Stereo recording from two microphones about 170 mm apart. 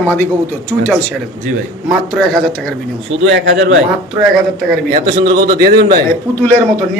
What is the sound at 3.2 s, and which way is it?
Speech, 90° right.